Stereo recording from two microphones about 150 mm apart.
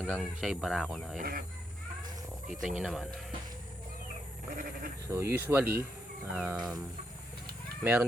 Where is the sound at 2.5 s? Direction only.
5° right (ahead or behind).